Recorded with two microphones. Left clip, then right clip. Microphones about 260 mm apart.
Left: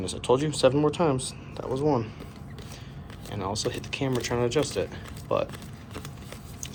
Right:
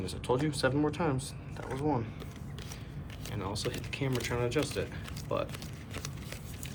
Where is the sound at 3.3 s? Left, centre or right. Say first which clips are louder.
Left 7 dB; centre.